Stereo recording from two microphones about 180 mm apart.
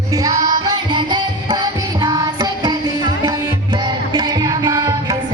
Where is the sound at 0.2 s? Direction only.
20° right (ahead or behind).